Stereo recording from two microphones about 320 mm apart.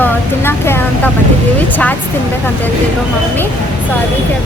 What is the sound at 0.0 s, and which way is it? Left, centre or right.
Vehicle, centre.